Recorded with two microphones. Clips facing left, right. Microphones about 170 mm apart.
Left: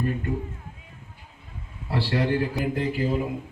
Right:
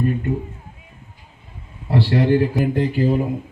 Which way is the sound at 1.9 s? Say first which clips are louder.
Right 7 dB; 25° right (ahead or behind).